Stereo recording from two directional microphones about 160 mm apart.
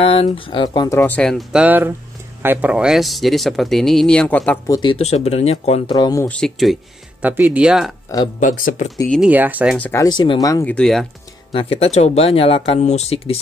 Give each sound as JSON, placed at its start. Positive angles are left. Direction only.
{"t": 0.0, "sound": "speech", "side_deg": 35}
{"t": 0.8, "sound": "speech", "side_deg": 10}
{"t": 1.6, "sound": "speech", "side_deg": -10}
{"t": 4.6, "sound": "speech", "side_deg": 25}
{"t": 4.9, "sound": "speech", "side_deg": 40}
{"t": 5.9, "sound": "speech", "side_deg": 25}
{"t": 6.2, "sound": "speech", "side_deg": 5}
{"t": 8.4, "sound": "speech", "side_deg": 55}
{"t": 9.3, "sound": "speech", "side_deg": -10}
{"t": 9.8, "sound": "speech", "side_deg": 10}
{"t": 10.0, "sound": "speech", "side_deg": 30}
{"t": 10.6, "sound": "speech", "side_deg": 10}
{"t": 11.5, "sound": "speech", "side_deg": 40}